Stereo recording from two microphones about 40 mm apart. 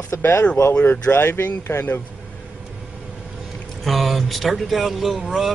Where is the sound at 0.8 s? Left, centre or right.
Left.